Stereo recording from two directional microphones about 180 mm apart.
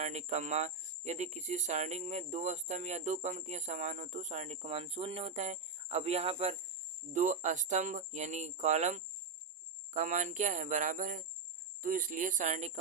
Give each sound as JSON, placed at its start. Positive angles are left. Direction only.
{"t": 0.0, "sound": "speech", "side_deg": -40}